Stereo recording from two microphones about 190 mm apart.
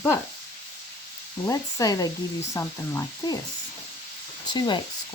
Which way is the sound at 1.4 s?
15° left (ahead or behind).